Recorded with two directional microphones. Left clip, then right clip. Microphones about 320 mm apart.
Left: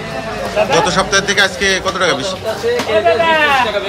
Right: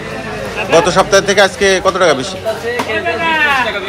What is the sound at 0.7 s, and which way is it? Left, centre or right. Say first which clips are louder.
A man's voice: right 6 dB; centre.